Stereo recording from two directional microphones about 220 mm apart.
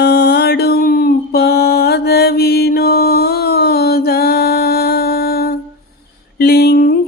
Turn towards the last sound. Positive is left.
turn(degrees=45)  # may be behind; listen again after turning